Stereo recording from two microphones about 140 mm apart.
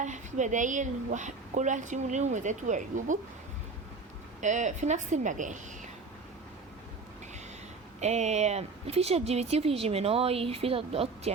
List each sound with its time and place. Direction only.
0.0 s a woman's voice: 60° right (ahead or behind)
4.4 s a woman's voice: 60° right (ahead or behind)
8.0 s speech: 55° right (ahead or behind)